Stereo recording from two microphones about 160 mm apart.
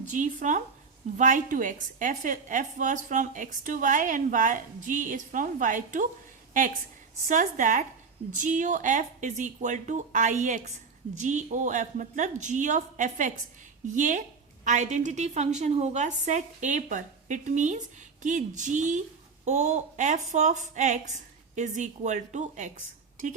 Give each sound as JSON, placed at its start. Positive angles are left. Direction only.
{"t": 0.0, "sound": "a woman's voice", "side_deg": -50}
{"t": 7.3, "sound": "a woman's voice", "side_deg": -55}